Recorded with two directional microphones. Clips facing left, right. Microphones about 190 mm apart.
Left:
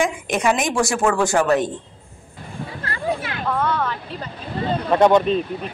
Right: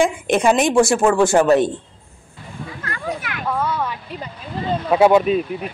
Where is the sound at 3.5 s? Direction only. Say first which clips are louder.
Left 1 dB; 10° right (ahead or behind).